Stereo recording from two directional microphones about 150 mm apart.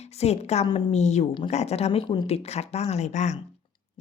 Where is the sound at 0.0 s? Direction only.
45° left (ahead or behind).